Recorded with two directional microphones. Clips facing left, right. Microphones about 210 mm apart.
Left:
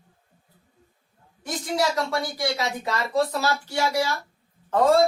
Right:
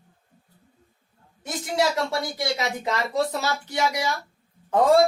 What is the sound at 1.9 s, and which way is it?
Speech, 20° right (ahead or behind).